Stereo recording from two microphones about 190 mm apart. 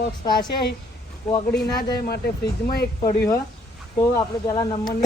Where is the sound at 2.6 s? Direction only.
55° left (ahead or behind).